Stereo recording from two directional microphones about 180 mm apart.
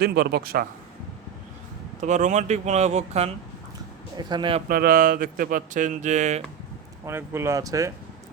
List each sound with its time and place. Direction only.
0.0 s a man's voice: 60° right (ahead or behind)
2.0 s speech: 40° right (ahead or behind)
4.2 s a man's voice: 25° right (ahead or behind)
4.7 s speech: 55° right (ahead or behind)
7.0 s speech: 15° right (ahead or behind)